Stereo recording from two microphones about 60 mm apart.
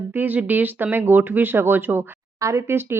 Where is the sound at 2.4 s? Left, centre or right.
Right.